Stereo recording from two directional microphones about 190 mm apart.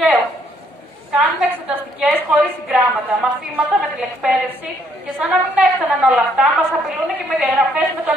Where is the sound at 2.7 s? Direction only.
Centre (ahead or behind).